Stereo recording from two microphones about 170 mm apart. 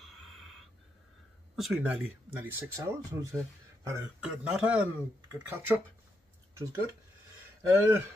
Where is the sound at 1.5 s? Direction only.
5° right (ahead or behind).